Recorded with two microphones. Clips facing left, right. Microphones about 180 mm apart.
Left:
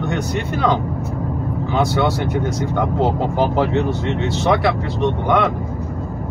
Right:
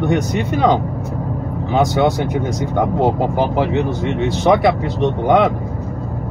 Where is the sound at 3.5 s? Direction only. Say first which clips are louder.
Right 1 dB; 10° right (ahead or behind).